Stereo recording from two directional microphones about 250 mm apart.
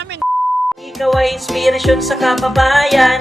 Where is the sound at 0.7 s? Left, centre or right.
Centre.